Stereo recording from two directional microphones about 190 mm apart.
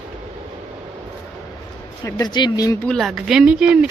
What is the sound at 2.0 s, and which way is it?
Speech, 20° left (ahead or behind).